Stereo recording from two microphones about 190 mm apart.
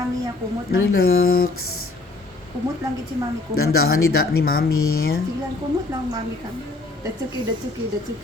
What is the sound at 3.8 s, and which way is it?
Speech, 55° left (ahead or behind).